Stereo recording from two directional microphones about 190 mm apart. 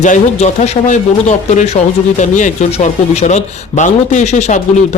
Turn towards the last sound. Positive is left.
turn(degrees=35)  # may be behind; listen again after turning